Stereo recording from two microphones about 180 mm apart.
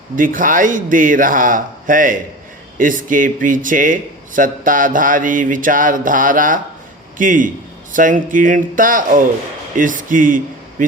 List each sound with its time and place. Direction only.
0.2 s mantra: 50° right (ahead or behind)
9.7 s speech: 45° right (ahead or behind)